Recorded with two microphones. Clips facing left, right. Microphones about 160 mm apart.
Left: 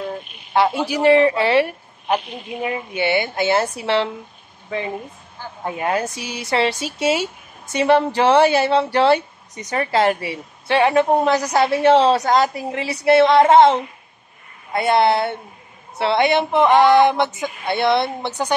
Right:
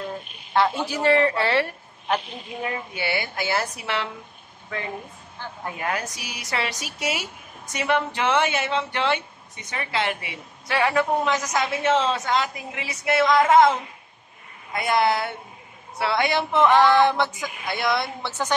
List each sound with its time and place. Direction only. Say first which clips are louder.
0.6 s speech: left 4 dB; 10° left (ahead or behind); by 4.1 s 30° left (ahead or behind)
5.7 s speech: left 7 dB; 25° left (ahead or behind)
10.8 s speech: left 6 dB; 25° left (ahead or behind)
11.2 s speech: left 7 dB; 35° left (ahead or behind); by 17.3 s 15° left (ahead or behind)
17.4 s speech: left 7 dB; 25° left (ahead or behind)